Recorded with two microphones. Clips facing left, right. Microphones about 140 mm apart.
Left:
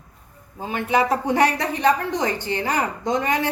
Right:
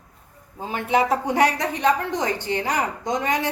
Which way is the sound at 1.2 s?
15° right (ahead or behind).